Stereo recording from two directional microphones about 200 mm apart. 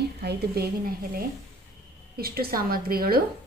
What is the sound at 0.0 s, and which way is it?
A woman's voice, 55° right (ahead or behind).